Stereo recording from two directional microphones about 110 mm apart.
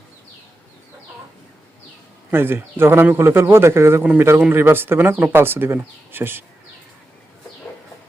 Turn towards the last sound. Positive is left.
turn(degrees=-20)  # may be behind; listen again after turning